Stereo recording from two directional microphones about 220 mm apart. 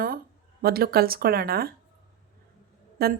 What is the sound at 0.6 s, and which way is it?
Speech, 45° right (ahead or behind).